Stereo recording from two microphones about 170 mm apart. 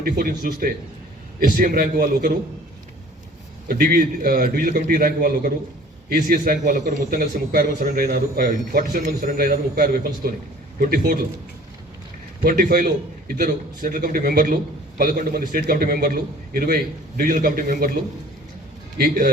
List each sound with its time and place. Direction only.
0.0 s a man's voice: 60° right (ahead or behind)
3.7 s a man's voice: 60° right (ahead or behind)
12.4 s a man's voice: 60° right (ahead or behind)
18.9 s a man's voice: 60° right (ahead or behind)